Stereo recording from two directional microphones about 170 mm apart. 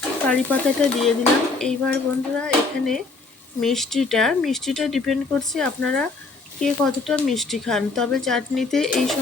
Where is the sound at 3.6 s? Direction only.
Centre (ahead or behind).